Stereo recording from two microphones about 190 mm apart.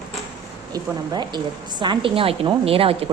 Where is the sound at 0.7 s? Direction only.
20° right (ahead or behind).